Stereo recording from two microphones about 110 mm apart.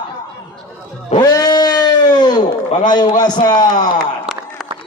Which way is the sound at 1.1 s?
35° left (ahead or behind).